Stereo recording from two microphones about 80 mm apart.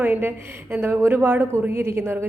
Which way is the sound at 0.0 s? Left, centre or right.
Right.